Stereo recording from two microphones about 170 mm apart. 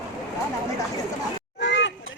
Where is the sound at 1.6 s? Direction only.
90° left.